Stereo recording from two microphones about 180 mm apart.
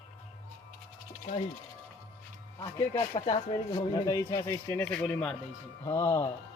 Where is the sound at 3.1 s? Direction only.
30° left (ahead or behind).